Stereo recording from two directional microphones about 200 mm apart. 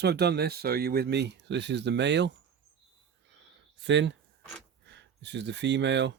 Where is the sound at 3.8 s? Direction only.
60° right (ahead or behind).